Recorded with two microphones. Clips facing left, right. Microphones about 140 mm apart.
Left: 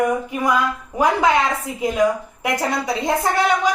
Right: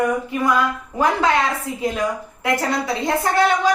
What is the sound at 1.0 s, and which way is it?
Speech, 15° left (ahead or behind).